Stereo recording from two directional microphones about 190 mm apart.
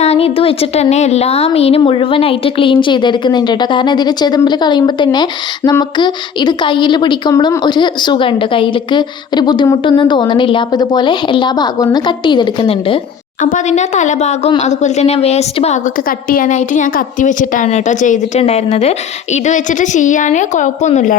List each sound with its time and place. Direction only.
0.0 s a woman's voice: 30° left (ahead or behind)
13.4 s a woman's voice: 40° left (ahead or behind)
16.0 s a woman's voice: 45° left (ahead or behind)